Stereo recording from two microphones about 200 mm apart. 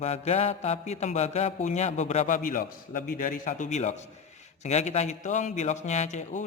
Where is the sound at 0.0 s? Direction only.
30° left (ahead or behind).